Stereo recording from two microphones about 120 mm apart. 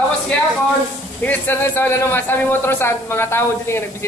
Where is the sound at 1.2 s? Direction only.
15° left (ahead or behind).